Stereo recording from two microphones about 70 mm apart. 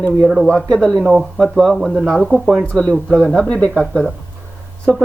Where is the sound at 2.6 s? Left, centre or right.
Centre.